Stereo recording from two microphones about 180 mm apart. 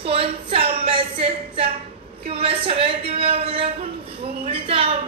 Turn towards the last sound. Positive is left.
turn(degrees=-30)  # may be behind; listen again after turning